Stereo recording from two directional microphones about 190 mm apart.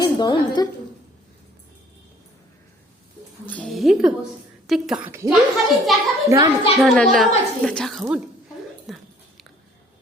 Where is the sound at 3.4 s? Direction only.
5° left (ahead or behind).